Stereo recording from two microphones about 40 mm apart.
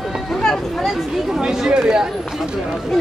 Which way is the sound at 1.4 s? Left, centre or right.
Centre.